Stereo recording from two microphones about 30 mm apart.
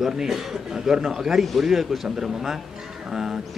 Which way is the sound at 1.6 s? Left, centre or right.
Centre.